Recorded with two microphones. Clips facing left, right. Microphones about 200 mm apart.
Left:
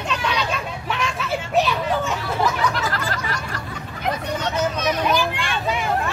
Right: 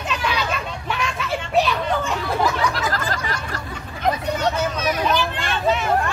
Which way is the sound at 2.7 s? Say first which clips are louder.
Right 1 dB; 40° right (ahead or behind).